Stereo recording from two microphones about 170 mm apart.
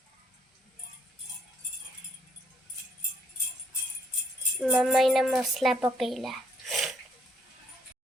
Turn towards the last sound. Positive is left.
turn(degrees=0)  # may be behind; listen again after turning